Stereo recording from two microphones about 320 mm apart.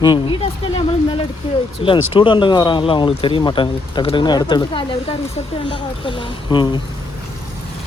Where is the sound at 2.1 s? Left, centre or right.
Centre.